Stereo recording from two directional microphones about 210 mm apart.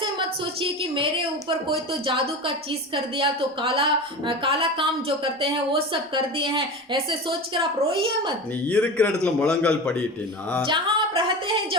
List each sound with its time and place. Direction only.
0.0 s a woman's voice: 25° right (ahead or behind)
8.6 s a man's voice: 5° left (ahead or behind)
10.7 s a woman's voice: 25° right (ahead or behind)